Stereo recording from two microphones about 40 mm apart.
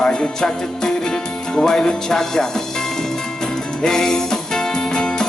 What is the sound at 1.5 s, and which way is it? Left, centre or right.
Music, centre.